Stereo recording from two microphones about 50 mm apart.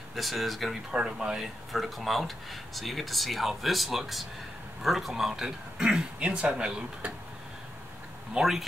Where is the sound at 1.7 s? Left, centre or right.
Centre; by 7.1 s right.